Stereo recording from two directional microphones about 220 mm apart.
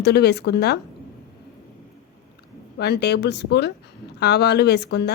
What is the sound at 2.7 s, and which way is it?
Speech, 50° left (ahead or behind).